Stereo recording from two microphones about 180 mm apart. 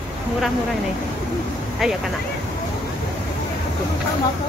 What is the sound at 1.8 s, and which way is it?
Speech, centre (ahead or behind).